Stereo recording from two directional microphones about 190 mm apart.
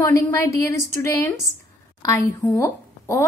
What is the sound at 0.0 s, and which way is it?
A woman's voice, 15° left (ahead or behind).